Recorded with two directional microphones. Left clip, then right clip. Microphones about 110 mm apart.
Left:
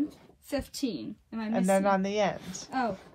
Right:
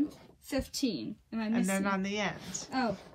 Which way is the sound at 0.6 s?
20° left (ahead or behind).